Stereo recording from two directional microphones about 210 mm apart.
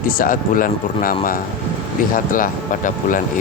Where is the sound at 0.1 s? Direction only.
40° left (ahead or behind).